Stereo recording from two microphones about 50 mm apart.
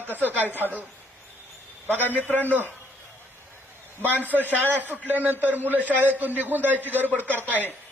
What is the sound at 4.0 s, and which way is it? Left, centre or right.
A man's voice, right.